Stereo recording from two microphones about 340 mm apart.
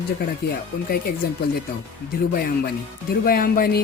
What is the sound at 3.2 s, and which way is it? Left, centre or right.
Speech, left.